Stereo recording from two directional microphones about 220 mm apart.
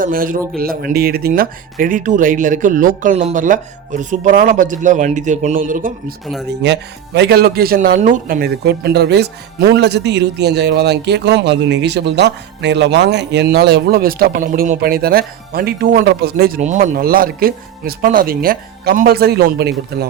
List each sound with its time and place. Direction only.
0.0 s speech: 40° right (ahead or behind)
6.5 s speech: 50° right (ahead or behind)
16.6 s speech: 30° right (ahead or behind)